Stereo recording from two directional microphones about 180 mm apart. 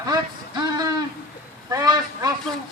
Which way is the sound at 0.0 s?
20° right (ahead or behind).